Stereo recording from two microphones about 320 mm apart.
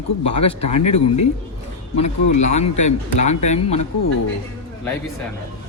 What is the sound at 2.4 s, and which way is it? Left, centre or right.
A man's voice, left.